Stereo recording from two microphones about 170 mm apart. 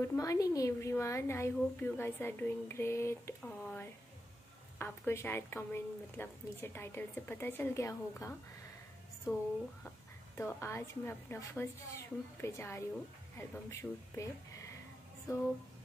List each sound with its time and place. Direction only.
0.0 s a woman's voice: 20° left (ahead or behind)
3.4 s a woman's voice: 5° left (ahead or behind)
9.8 s a woman's voice: 15° left (ahead or behind)